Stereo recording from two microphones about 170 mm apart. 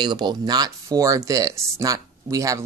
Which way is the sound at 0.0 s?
25° right (ahead or behind).